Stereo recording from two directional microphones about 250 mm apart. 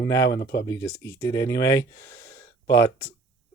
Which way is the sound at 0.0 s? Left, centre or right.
Centre.